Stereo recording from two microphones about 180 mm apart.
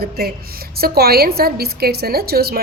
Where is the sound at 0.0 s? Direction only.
60° right (ahead or behind).